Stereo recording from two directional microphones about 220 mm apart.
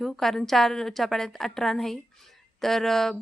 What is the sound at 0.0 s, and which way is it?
A woman's voice, centre (ahead or behind).